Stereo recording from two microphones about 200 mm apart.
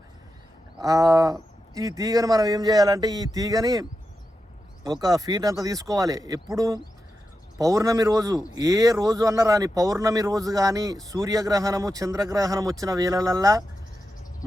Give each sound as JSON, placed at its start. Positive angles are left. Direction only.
{"t": 0.8, "sound": "a man's voice", "side_deg": -15}